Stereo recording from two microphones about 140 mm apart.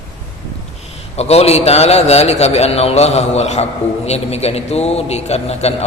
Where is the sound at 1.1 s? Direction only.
50° left (ahead or behind).